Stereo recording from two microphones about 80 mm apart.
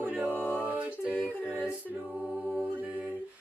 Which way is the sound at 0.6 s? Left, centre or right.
Centre.